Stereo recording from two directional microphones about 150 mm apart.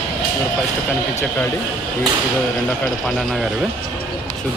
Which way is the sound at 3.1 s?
Centre (ahead or behind).